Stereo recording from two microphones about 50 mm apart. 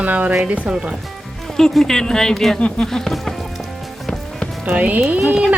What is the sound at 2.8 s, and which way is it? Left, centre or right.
Speech, centre.